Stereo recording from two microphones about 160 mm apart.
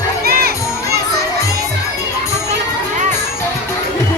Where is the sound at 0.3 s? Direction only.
85° right.